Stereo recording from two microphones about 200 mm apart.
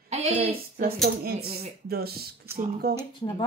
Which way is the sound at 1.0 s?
50° right (ahead or behind).